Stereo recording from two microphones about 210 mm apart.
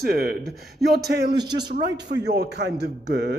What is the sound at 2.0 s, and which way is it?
Speech, 55° right (ahead or behind).